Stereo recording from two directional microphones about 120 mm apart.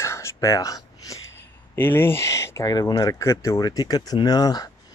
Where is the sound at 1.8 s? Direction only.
20° left (ahead or behind).